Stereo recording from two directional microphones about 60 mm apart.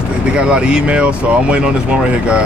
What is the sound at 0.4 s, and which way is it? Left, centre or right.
Speech, centre.